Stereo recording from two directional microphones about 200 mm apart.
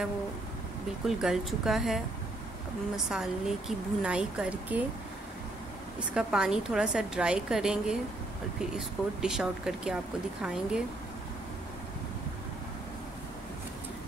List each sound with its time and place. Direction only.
1.0 s a woman's voice: centre (ahead or behind)
3.1 s a woman's voice: centre (ahead or behind)
6.1 s a woman's voice: 5° right (ahead or behind)